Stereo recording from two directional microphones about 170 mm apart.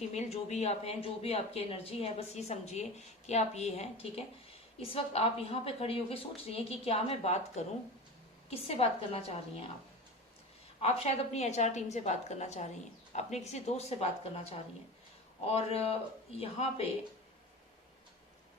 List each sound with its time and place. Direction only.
0.1 s speech: 40° left (ahead or behind)
10.8 s speech: 35° left (ahead or behind)